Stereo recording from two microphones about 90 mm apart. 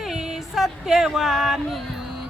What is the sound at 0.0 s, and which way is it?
Speech, 5° right (ahead or behind).